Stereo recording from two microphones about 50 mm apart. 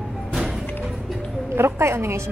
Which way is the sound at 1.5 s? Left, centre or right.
Right.